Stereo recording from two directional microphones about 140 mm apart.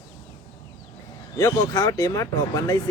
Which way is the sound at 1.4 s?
20° left (ahead or behind).